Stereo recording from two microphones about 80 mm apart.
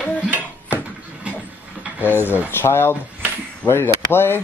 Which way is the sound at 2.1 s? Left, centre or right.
Left.